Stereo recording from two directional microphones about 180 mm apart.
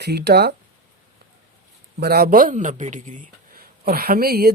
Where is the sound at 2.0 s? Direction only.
60° right (ahead or behind).